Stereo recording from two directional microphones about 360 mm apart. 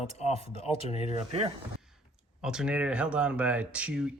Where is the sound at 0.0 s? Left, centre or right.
Centre.